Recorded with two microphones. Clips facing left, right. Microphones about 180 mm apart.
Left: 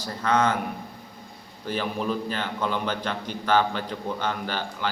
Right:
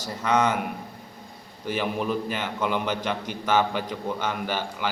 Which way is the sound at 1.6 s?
10° right (ahead or behind).